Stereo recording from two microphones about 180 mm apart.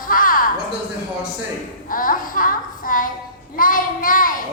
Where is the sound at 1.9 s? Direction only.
50° left (ahead or behind).